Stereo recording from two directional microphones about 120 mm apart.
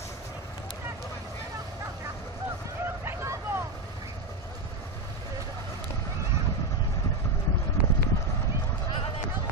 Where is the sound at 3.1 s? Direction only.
20° right (ahead or behind).